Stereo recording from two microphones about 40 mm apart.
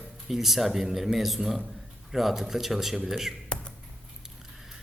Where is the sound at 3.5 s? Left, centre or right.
Left.